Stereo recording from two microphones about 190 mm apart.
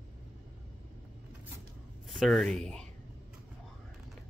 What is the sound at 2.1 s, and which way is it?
Speech, centre (ahead or behind).